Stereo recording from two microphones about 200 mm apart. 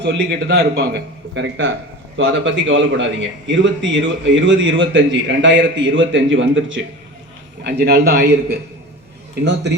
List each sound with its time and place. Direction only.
0.0 s a man's voice: 60° right (ahead or behind)
7.6 s a man's voice: 55° right (ahead or behind)
9.3 s speech: 60° right (ahead or behind)